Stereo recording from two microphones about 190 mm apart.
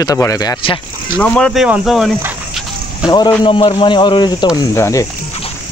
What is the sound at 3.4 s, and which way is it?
Speech, 25° left (ahead or behind).